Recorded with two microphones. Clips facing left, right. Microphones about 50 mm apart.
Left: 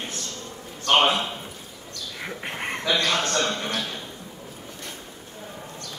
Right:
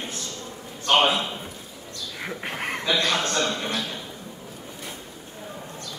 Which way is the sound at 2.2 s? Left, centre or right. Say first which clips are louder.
Right 1 dB; centre.